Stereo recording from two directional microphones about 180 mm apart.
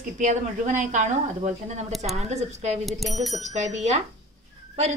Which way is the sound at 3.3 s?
40° right (ahead or behind).